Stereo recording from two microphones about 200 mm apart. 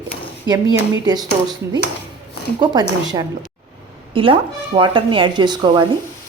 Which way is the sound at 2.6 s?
20° right (ahead or behind).